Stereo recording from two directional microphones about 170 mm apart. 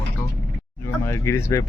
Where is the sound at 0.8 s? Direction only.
15° left (ahead or behind).